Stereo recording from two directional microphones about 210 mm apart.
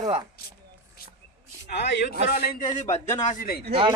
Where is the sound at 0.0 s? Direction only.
20° right (ahead or behind).